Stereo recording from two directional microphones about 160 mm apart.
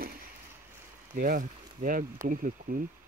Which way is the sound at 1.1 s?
55° right (ahead or behind).